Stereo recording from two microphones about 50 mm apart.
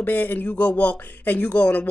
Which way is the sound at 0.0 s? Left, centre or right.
Left.